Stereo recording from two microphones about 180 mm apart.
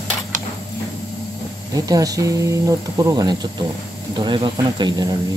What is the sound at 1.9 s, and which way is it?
Speech, 20° right (ahead or behind).